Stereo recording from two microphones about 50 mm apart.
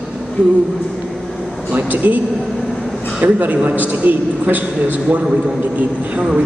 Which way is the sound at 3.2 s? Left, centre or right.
Right.